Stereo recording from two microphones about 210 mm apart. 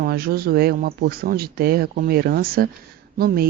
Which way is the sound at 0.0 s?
45° right (ahead or behind).